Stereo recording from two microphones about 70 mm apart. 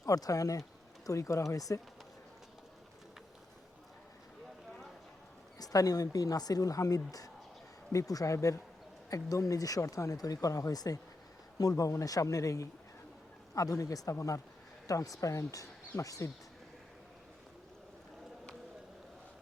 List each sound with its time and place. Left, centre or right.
0.0 s speech: left
5.5 s speech: left